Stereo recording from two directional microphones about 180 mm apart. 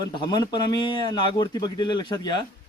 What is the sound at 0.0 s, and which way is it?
Speech, 25° left (ahead or behind).